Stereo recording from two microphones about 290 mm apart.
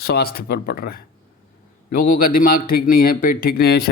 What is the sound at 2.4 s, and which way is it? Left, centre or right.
Speech, left.